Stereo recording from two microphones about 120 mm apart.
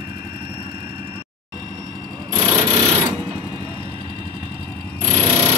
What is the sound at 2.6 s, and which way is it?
Sewing machine, 60° right (ahead or behind).